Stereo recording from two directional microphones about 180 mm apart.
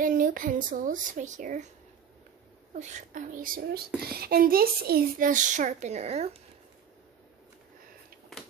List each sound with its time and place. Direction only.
0.0 s a child's voice: 50° right (ahead or behind)
2.7 s a child's voice: 40° right (ahead or behind)